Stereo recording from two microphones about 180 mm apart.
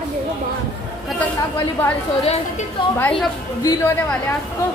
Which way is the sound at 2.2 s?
35° left (ahead or behind).